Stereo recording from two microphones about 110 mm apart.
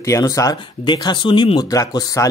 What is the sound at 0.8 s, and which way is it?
Speech, 45° left (ahead or behind).